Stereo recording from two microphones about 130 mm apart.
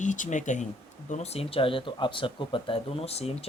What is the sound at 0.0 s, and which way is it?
Speech, 70° left (ahead or behind).